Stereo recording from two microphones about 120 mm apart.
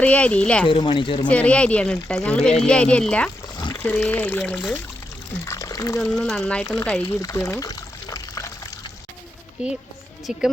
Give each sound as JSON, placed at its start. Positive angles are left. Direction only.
{"t": 0.0, "sound": "speech", "side_deg": 10}
{"t": 0.7, "sound": "speech", "side_deg": 40}
{"t": 1.3, "sound": "speech", "side_deg": 10}
{"t": 4.5, "sound": "speech", "side_deg": 5}
{"t": 5.5, "sound": "water", "side_deg": 30}
{"t": 6.0, "sound": "speech", "side_deg": 15}
{"t": 7.1, "sound": "water", "side_deg": 25}
{"t": 9.6, "sound": "speech", "side_deg": -10}